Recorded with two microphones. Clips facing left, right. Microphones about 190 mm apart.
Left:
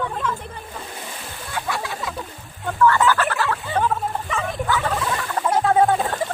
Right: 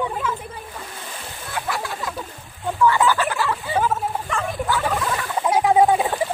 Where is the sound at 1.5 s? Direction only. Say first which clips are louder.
Even; centre (ahead or behind).